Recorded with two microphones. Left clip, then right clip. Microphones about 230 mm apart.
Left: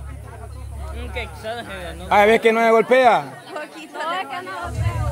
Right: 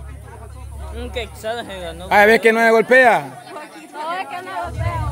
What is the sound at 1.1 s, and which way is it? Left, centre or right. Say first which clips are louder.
Speech: right 3 dB; right.